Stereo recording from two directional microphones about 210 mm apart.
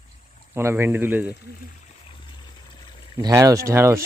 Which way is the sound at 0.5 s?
10° right (ahead or behind).